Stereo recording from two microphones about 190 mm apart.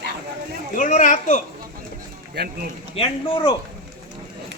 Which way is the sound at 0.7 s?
45° left (ahead or behind).